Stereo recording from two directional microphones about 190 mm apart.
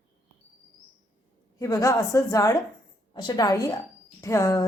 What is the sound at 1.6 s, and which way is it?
A woman's voice, 15° left (ahead or behind).